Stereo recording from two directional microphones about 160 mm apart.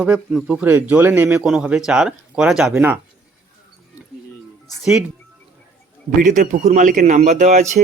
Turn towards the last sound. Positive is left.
turn(degrees=-45)  # may be behind; listen again after turning